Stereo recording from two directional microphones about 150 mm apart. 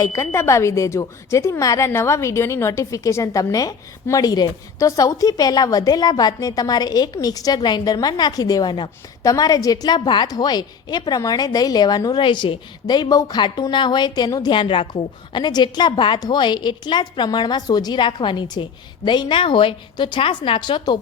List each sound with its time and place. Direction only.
0.0 s a woman's voice: 20° left (ahead or behind)